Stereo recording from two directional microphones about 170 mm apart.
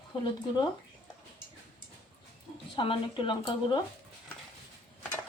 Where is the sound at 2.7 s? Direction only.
30° left (ahead or behind).